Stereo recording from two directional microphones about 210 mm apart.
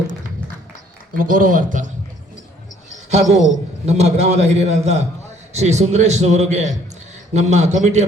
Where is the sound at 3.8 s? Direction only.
30° right (ahead or behind).